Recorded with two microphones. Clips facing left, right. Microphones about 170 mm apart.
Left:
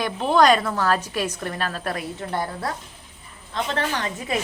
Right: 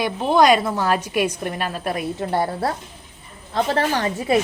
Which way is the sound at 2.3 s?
30° right (ahead or behind).